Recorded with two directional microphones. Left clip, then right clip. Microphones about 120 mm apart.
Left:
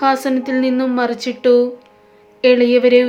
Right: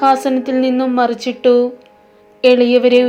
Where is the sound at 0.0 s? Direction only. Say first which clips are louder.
Right 3 dB; 5° right (ahead or behind).